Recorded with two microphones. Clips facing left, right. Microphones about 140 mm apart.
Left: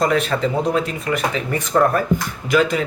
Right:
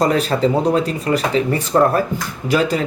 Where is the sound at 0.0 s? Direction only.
35° right (ahead or behind).